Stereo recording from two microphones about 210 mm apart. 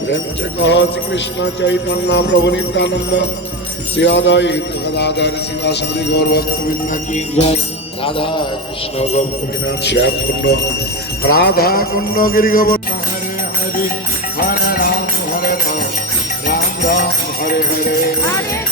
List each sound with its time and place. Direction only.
0.6 s jingle bell: 60° left (ahead or behind)
7.1 s jingle bell: 35° left (ahead or behind)
8.0 s speech: 25° left (ahead or behind)
9.8 s jingle bell: 55° left (ahead or behind)
14.3 s music: 45° left (ahead or behind)
16.5 s jingle bell: 45° left (ahead or behind)